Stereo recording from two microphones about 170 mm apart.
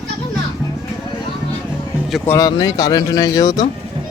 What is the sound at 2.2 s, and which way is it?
Speech, 20° left (ahead or behind).